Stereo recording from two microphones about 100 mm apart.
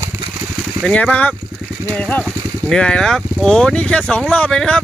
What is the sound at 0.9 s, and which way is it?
Speech, 10° left (ahead or behind).